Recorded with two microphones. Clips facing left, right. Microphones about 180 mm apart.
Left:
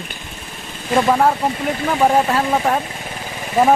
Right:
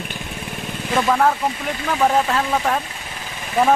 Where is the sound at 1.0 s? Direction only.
15° left (ahead or behind).